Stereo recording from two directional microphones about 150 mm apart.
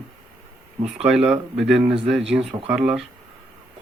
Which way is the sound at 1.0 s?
5° right (ahead or behind).